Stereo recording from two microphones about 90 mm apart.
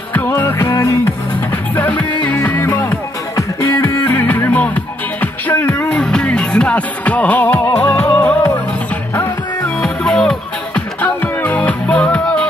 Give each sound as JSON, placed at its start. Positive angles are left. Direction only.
{"t": 0.1, "sound": "music", "side_deg": 20}
{"t": 0.6, "sound": "music", "side_deg": 40}
{"t": 1.8, "sound": "music", "side_deg": 15}
{"t": 3.3, "sound": "music", "side_deg": 40}
{"t": 3.8, "sound": "music", "side_deg": 20}
{"t": 5.9, "sound": "music", "side_deg": 10}
{"t": 9.8, "sound": "music", "side_deg": 5}